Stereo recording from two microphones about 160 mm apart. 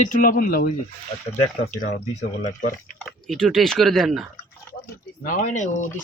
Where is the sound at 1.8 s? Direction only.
55° left (ahead or behind).